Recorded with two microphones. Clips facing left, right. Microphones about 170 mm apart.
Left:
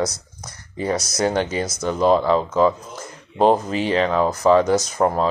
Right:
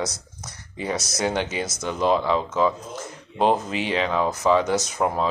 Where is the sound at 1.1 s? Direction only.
45° left (ahead or behind).